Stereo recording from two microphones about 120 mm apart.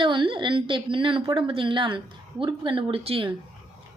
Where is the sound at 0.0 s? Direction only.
45° right (ahead or behind).